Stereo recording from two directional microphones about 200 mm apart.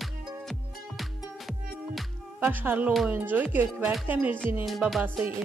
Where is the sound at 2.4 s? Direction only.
5° right (ahead or behind).